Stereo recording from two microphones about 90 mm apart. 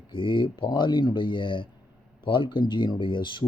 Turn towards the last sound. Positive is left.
turn(degrees=60)  # may be behind; listen again after turning